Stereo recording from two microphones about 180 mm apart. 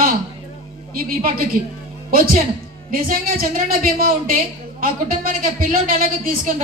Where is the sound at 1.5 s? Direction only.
50° right (ahead or behind).